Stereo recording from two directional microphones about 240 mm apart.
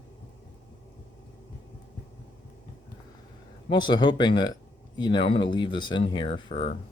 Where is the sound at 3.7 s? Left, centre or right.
Centre.